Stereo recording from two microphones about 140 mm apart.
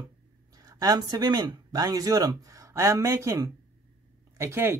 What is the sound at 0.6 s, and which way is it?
Speech, 25° right (ahead or behind).